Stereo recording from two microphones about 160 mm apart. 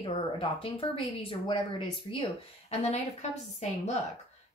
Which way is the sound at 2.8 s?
45° left (ahead or behind).